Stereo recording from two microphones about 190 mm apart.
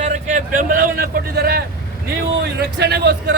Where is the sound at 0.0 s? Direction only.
40° right (ahead or behind).